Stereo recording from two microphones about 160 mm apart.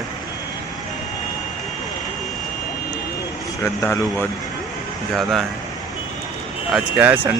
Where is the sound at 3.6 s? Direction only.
15° left (ahead or behind).